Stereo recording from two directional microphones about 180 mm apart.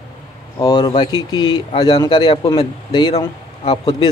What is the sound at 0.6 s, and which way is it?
Speech, 20° left (ahead or behind).